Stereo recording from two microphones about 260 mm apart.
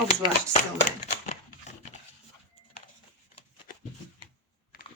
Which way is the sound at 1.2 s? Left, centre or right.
Left.